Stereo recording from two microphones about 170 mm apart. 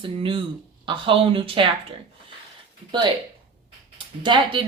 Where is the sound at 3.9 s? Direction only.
30° right (ahead or behind).